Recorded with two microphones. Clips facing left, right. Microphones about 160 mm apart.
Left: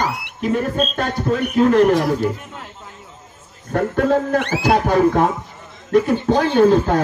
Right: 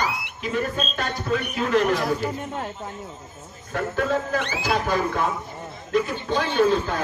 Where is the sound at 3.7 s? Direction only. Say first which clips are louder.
Left 7 dB; 45° left (ahead or behind).